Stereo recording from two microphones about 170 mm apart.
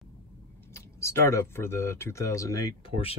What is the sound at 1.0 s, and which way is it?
Speech, 15° left (ahead or behind).